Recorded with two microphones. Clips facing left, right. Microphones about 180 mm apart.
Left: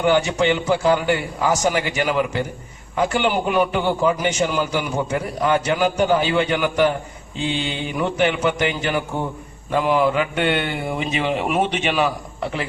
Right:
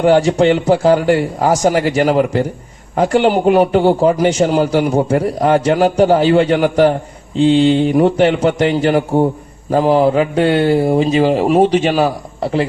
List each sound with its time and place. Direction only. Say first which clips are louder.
0.0 s a man's voice: right 7 dB; 35° right (ahead or behind)